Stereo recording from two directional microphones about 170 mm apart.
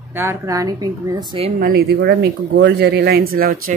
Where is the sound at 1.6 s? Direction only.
65° right (ahead or behind).